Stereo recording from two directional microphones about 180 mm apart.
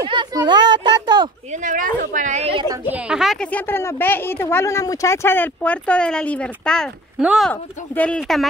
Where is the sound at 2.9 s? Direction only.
5° right (ahead or behind).